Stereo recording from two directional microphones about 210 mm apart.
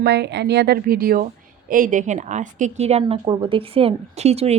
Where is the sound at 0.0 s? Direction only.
55° right (ahead or behind).